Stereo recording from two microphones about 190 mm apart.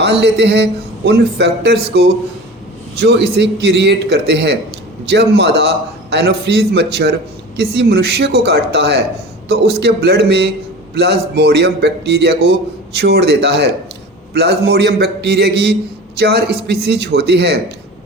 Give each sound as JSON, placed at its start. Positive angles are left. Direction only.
{"t": 0.0, "sound": "a man's voice", "side_deg": -65}
{"t": 3.0, "sound": "a man's voice", "side_deg": -60}